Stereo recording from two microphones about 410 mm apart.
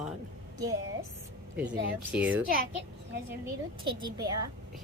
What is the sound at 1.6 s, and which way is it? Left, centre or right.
Speech, right.